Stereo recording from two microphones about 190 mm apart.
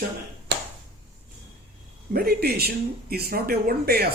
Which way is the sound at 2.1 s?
55° right (ahead or behind).